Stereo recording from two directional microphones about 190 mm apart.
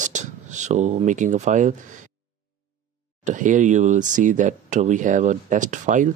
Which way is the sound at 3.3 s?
40° right (ahead or behind).